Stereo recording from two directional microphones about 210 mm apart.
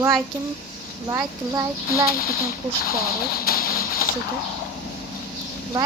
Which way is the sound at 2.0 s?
45° left (ahead or behind).